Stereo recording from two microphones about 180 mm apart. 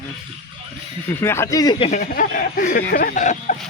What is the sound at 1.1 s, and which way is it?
Speech, 15° left (ahead or behind).